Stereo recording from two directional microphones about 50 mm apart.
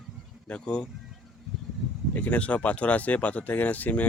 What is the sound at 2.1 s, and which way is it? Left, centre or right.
Speech, left.